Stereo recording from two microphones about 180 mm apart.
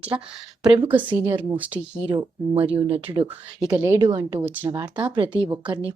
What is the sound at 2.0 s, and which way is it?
Speech, 30° right (ahead or behind).